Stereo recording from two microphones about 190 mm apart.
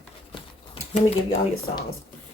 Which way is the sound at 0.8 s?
30° left (ahead or behind).